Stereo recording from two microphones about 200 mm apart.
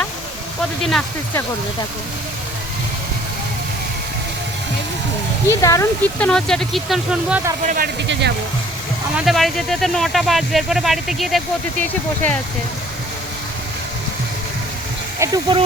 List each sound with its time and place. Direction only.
0.8 s speech: centre (ahead or behind)
5.5 s speech: 15° left (ahead or behind); by 7.5 s 5° right (ahead or behind)
7.6 s speech: 40° right (ahead or behind)
9.1 s speech: centre (ahead or behind)
15.2 s speech: 20° right (ahead or behind)